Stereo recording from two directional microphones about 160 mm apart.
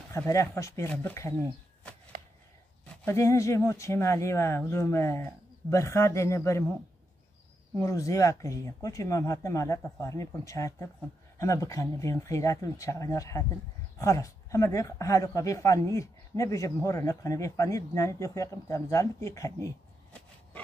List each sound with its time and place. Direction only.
0.1 s speech: 20° left (ahead or behind)
3.1 s speech: 20° left (ahead or behind)
7.8 s speech: 20° left (ahead or behind)